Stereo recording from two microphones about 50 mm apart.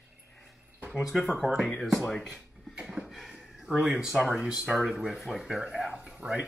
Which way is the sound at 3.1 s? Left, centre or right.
Centre.